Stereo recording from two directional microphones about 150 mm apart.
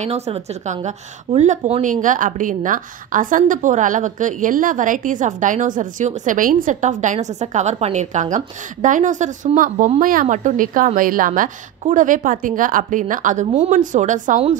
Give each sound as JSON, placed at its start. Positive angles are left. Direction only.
{"t": 0.0, "sound": "a woman's voice", "side_deg": -45}